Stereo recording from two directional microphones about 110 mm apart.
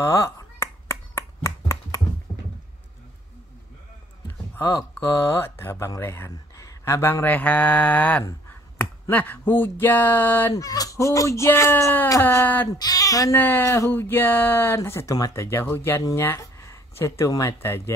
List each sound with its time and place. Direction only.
0.0 s finger snapping: 25° left (ahead or behind)
2.3 s a sound: 30° left (ahead or behind)
5.4 s speech: 25° left (ahead or behind)
10.5 s speech: 35° left (ahead or behind)
12.7 s speech: 35° left (ahead or behind)
13.4 s speech: 20° left (ahead or behind)